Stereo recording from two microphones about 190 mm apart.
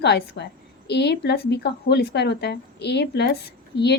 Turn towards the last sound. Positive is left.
turn(degrees=60)  # may be behind; listen again after turning